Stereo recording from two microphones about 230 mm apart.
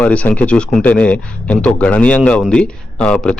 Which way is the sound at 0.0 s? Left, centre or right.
Centre.